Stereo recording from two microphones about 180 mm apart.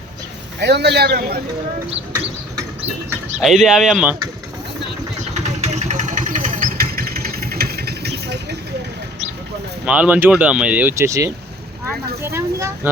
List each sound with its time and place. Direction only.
0.6 s a man's voice: 70° right (ahead or behind)
3.4 s speech: centre (ahead or behind)
5.5 s vehicle: 40° right (ahead or behind); by 8.5 s 65° right (ahead or behind)
9.8 s speech: 5° right (ahead or behind)
12.2 s a sound: 15° right (ahead or behind)